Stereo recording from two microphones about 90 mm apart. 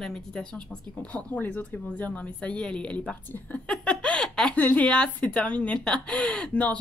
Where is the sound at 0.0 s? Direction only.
5° left (ahead or behind).